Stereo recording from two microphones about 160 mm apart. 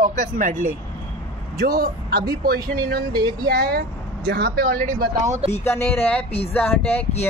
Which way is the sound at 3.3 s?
75° right (ahead or behind).